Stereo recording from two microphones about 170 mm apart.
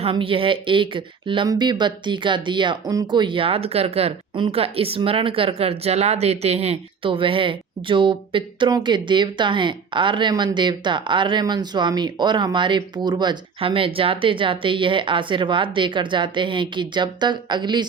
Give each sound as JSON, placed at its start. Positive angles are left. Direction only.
{"t": 0.0, "sound": "speech", "side_deg": -30}